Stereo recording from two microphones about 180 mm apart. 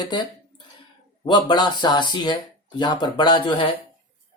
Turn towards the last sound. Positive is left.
turn(degrees=25)  # may be behind; listen again after turning